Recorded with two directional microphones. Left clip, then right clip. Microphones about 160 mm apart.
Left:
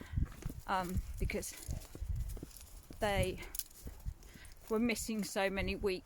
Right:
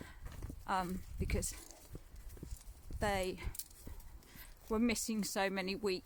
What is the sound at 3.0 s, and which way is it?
Speech, 15° right (ahead or behind).